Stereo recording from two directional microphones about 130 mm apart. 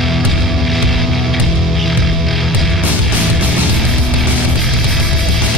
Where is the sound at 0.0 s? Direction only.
Centre (ahead or behind).